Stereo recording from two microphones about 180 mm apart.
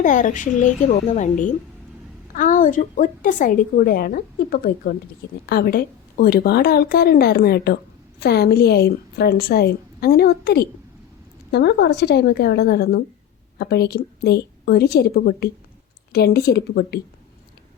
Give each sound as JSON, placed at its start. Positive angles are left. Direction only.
{"t": 0.0, "sound": "a woman's voice", "side_deg": 45}